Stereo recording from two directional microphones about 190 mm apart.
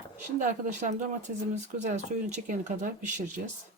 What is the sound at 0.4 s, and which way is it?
Speech, 40° right (ahead or behind).